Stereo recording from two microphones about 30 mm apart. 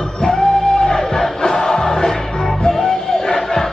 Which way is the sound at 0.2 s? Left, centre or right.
Left.